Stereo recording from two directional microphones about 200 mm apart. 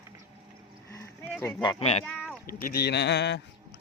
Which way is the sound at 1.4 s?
10° left (ahead or behind).